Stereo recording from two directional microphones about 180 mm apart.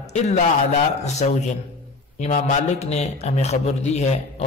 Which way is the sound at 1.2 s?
45° left (ahead or behind).